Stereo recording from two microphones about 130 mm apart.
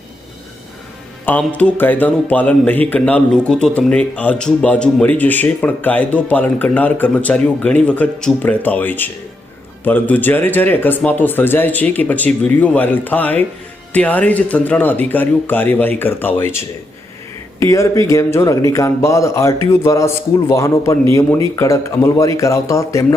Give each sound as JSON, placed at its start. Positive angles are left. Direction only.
{"t": 1.2, "sound": "speech", "side_deg": 10}
{"t": 17.6, "sound": "speech", "side_deg": 25}